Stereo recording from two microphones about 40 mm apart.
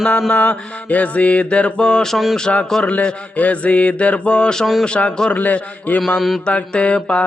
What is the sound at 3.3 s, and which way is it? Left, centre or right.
Mantra, left.